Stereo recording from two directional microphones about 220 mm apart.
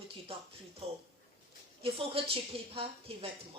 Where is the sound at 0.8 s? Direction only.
25° right (ahead or behind).